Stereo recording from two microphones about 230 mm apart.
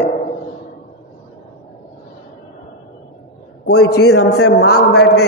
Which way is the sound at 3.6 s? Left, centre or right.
Left.